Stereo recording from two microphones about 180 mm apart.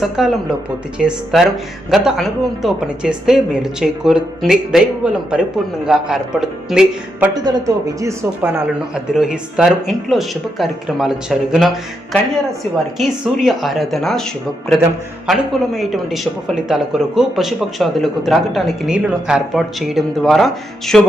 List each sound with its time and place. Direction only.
0.0 s speech: centre (ahead or behind)
7.9 s speech: 15° right (ahead or behind)
9.1 s speech: 5° right (ahead or behind)
13.0 s speech: centre (ahead or behind)
15.3 s speech: centre (ahead or behind)